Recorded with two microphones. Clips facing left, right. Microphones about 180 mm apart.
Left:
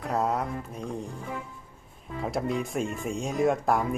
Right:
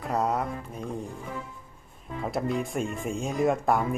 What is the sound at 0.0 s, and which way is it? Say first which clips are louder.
Mantra: even; centre (ahead or behind).